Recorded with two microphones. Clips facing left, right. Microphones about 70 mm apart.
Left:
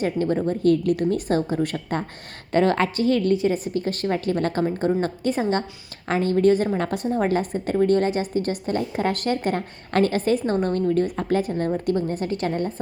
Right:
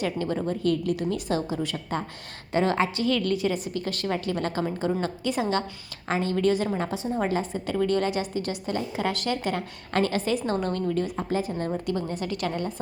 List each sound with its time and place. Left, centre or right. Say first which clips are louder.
0.0 s a woman's voice: left 5 dB; left
0.6 s a woman's voice: left 7 dB; left
3.0 s a woman's voice: left 5 dB; left
6.7 s a woman's voice: left 4 dB; left
11.9 s a woman's voice: left 5 dB; left